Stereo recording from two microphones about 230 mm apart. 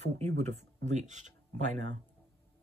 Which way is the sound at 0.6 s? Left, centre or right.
Right.